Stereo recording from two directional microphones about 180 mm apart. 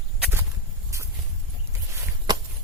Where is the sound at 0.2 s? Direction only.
15° right (ahead or behind).